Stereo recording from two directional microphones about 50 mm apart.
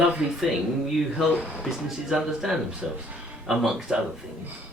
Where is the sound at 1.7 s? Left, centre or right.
Centre.